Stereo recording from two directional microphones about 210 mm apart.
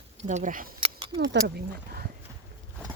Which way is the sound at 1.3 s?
50° right (ahead or behind).